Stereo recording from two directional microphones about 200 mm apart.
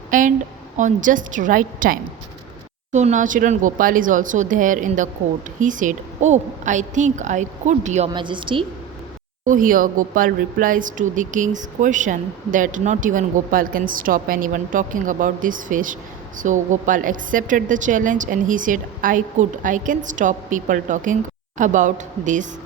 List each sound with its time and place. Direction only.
0.1 s a woman's voice: 40° right (ahead or behind)
8.1 s a woman's voice: 25° right (ahead or behind)
9.5 s speech: 45° right (ahead or behind)